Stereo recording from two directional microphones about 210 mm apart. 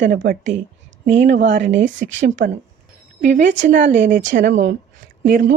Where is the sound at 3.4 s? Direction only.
60° right (ahead or behind).